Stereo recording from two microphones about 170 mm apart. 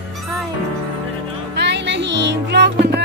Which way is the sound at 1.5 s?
90° right.